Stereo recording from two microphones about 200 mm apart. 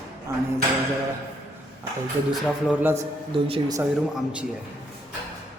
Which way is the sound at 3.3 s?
20° right (ahead or behind).